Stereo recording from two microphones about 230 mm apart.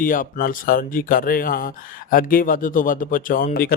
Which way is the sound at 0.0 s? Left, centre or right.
Left.